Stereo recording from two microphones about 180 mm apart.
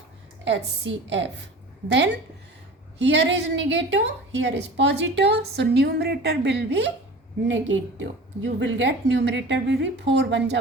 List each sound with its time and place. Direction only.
0.4 s a woman's voice: 85° right
1.9 s a woman's voice: 75° right (ahead or behind)
7.7 s a woman's voice: 90° right; by 10.6 s 75° right (ahead or behind)